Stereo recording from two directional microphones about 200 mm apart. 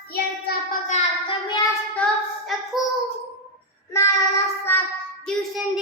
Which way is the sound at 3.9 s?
15° left (ahead or behind).